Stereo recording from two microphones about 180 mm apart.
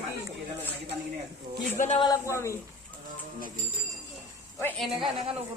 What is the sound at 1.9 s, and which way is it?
Speech, 20° left (ahead or behind).